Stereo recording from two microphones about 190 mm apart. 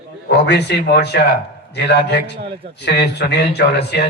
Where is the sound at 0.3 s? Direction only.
60° left (ahead or behind).